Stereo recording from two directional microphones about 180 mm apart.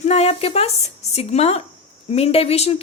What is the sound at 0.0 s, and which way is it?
Speech, 35° left (ahead or behind).